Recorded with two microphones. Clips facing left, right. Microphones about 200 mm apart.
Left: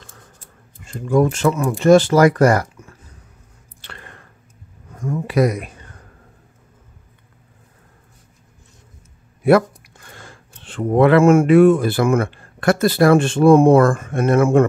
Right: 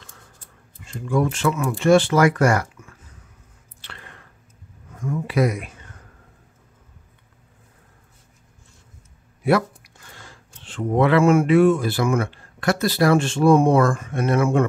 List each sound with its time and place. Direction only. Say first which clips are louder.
0.8 s speech: left 5 dB; 45° left (ahead or behind)
3.8 s a sound: left 3 dB; 50° left (ahead or behind)
9.4 s speech: left 6 dB; 50° left (ahead or behind)